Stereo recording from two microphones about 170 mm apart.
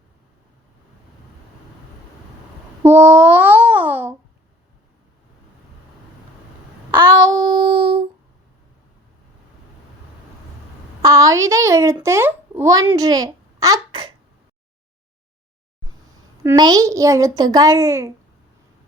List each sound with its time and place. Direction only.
2.8 s babbling: 15° right (ahead or behind)
6.9 s child singing: 25° right (ahead or behind)
11.0 s a child's voice: 20° right (ahead or behind)
16.4 s a child's voice: 20° right (ahead or behind)